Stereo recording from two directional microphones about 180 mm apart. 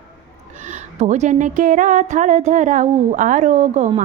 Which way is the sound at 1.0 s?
40° right (ahead or behind).